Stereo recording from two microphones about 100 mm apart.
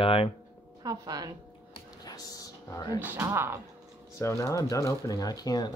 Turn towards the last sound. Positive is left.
turn(degrees=40)  # may be behind; listen again after turning